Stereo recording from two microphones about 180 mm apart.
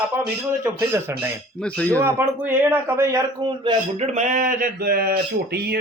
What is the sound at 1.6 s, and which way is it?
Speech, 5° left (ahead or behind).